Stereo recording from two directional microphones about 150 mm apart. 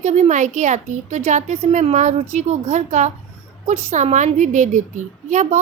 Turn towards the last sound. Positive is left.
turn(degrees=-55)  # may be behind; listen again after turning